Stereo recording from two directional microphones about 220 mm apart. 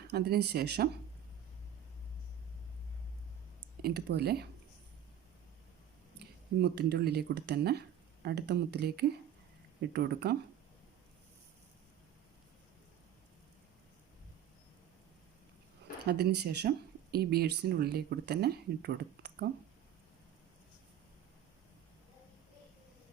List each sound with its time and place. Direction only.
0.1 s speech: 50° right (ahead or behind)
3.8 s speech: 45° right (ahead or behind)
6.1 s speech: 50° right (ahead or behind)
16.0 s speech: 50° right (ahead or behind)